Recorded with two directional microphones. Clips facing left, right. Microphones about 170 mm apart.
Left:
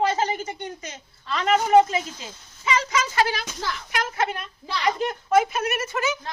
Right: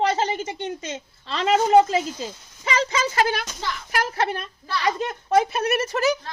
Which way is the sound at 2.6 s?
30° right (ahead or behind).